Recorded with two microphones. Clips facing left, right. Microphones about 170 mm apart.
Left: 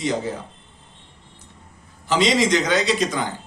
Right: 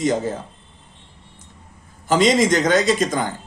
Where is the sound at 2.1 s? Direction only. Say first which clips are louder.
Right 3 dB; 50° right (ahead or behind).